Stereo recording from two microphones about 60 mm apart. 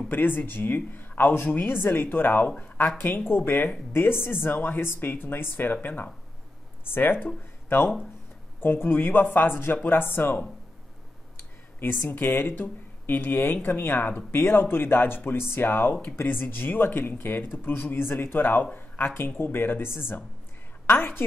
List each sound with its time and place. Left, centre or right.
0.1 s speech: left
2.4 s speech: left
3.3 s speech: left
8.5 s speech: left
11.8 s speech: left